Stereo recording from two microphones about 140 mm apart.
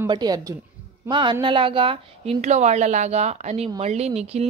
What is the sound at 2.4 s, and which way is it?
A woman's voice, 55° right (ahead or behind).